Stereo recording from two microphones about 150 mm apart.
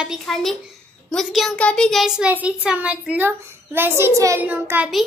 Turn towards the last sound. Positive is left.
turn(degrees=-15)  # may be behind; listen again after turning